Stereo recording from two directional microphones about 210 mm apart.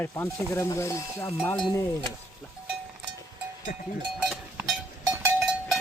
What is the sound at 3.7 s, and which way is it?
Speech, 40° left (ahead or behind).